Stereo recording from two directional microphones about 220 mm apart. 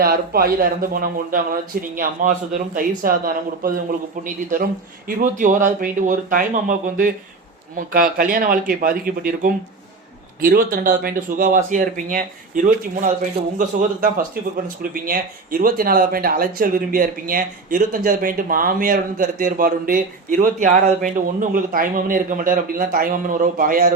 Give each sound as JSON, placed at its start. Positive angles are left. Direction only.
{"t": 0.0, "sound": "speech", "side_deg": -45}